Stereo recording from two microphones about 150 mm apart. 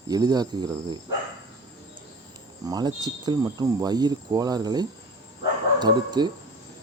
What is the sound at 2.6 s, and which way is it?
Speech, 25° right (ahead or behind).